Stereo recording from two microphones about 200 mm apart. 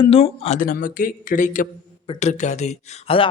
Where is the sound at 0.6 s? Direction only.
40° left (ahead or behind).